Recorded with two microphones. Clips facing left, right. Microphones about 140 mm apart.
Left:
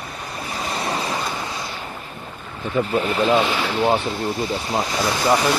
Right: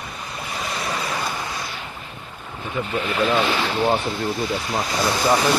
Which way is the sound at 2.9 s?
35° left (ahead or behind).